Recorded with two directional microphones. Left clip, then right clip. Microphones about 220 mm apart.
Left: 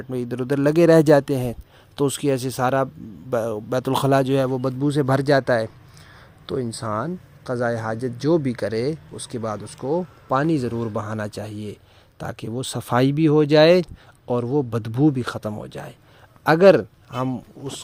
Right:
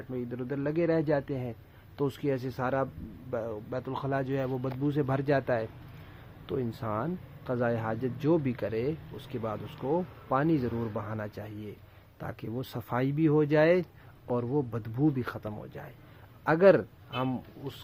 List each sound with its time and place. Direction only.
0.1 s a man's voice: 55° left (ahead or behind); by 5.6 s 35° left (ahead or behind)
6.7 s a man's voice: 30° left (ahead or behind)